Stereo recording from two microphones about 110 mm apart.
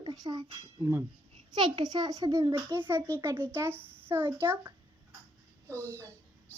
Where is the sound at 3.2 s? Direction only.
20° right (ahead or behind).